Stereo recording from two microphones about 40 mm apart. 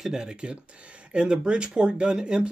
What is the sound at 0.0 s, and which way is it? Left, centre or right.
Speech, centre.